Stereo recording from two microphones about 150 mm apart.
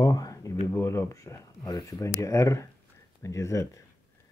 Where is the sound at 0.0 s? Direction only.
25° left (ahead or behind).